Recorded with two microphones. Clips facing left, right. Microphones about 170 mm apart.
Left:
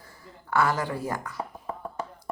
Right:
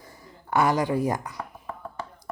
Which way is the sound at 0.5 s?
15° right (ahead or behind).